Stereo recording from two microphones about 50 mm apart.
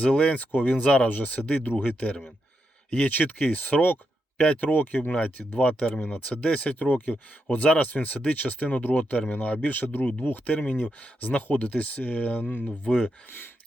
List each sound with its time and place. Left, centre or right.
0.0 s speech: left
4.4 s speech: left
4.6 s speech: left
12.6 s speech: left